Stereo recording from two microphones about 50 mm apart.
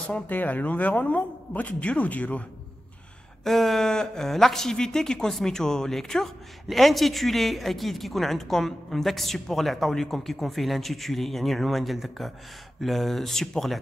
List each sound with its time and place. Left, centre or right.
0.3 s speech: left
3.4 s speech: centre